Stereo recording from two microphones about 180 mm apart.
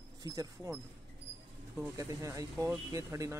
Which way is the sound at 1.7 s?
15° right (ahead or behind).